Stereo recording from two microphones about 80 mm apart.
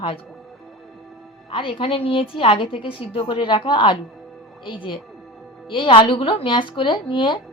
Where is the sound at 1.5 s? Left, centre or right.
Left.